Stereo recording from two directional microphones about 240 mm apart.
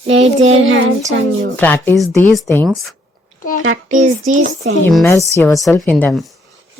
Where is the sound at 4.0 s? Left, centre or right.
Right.